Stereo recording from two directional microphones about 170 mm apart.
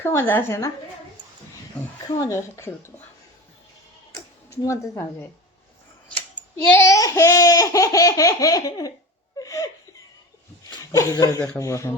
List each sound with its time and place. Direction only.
0.0 s speech: 15° left (ahead or behind)
2.0 s speech: 20° left (ahead or behind)
4.1 s a child's voice: 20° left (ahead or behind)
9.4 s laughter: 20° left (ahead or behind)
10.7 s speech: 20° left (ahead or behind)